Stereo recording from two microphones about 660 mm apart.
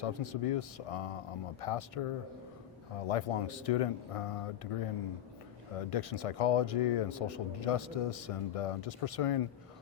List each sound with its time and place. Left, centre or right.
0.0 s speech: left
5.8 s speech: left